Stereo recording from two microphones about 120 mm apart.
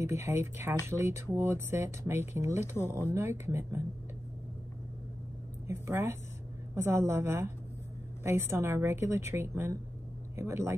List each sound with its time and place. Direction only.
0.0 s speech: 20° right (ahead or behind)
5.7 s speech: 25° right (ahead or behind)